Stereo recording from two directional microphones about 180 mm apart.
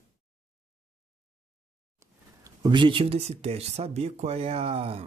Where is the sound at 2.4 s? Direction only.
25° right (ahead or behind).